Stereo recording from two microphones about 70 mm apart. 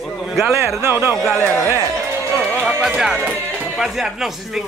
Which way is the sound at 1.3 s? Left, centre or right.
Left.